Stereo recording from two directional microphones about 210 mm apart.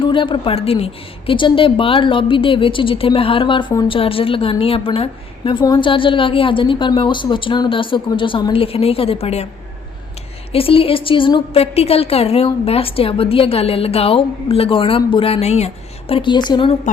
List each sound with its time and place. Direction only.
0.0 s a woman's voice: 25° left (ahead or behind)
10.5 s a woman's voice: 25° left (ahead or behind)